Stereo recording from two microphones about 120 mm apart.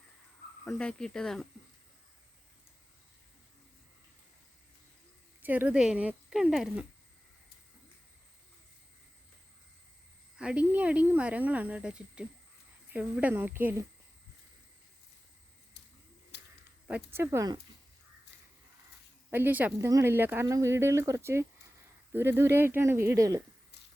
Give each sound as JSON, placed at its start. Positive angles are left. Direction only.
{"t": 0.6, "sound": "speech", "side_deg": 5}
{"t": 5.4, "sound": "speech", "side_deg": -15}
{"t": 10.3, "sound": "speech", "side_deg": -10}
{"t": 16.8, "sound": "speech", "side_deg": -15}
{"t": 19.3, "sound": "speech", "side_deg": -15}